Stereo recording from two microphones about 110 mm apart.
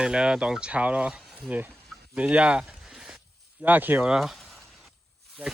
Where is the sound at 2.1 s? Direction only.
10° right (ahead or behind).